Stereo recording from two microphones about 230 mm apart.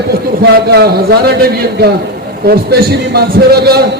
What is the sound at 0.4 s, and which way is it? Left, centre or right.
A man's voice, right.